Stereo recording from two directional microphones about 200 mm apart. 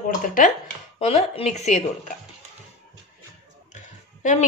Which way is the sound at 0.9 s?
30° left (ahead or behind).